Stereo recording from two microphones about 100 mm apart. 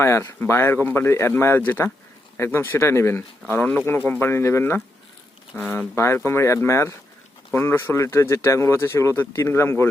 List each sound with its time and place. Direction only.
0.0 s speech: 25° left (ahead or behind)
6.0 s speech: 25° left (ahead or behind)